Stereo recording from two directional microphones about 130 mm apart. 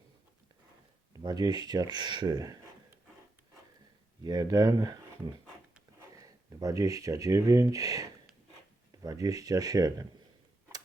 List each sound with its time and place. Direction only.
1.2 s speech: 35° right (ahead or behind)
4.2 s speech: 30° right (ahead or behind)